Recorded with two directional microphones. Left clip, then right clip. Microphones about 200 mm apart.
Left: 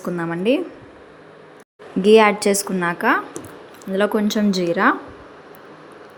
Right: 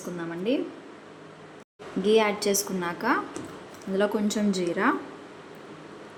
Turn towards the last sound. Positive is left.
turn(degrees=20)  # may be behind; listen again after turning